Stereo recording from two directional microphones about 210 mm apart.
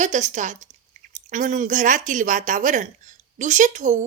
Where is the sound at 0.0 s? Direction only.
35° right (ahead or behind).